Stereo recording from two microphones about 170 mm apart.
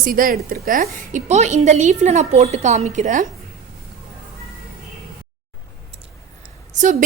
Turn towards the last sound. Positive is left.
turn(degrees=-45)  # may be behind; listen again after turning